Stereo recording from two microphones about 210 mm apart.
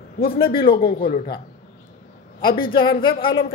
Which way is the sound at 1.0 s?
25° left (ahead or behind).